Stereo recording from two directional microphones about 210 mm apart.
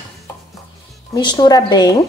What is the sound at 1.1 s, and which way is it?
Speech, 20° left (ahead or behind).